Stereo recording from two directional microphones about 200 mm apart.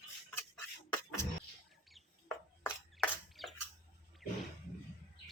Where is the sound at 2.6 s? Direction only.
5° left (ahead or behind).